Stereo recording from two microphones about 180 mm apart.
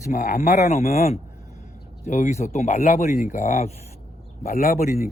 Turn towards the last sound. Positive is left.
turn(degrees=50)  # may be behind; listen again after turning